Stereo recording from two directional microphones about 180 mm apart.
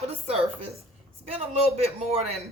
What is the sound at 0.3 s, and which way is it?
Speech, 30° right (ahead or behind).